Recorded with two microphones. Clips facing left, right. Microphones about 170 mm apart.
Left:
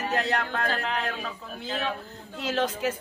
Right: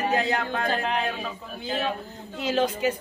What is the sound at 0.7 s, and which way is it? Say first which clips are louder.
Speech: right 3 dB; 20° right (ahead or behind).